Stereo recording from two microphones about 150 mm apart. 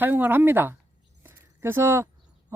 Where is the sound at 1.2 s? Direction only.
15° right (ahead or behind).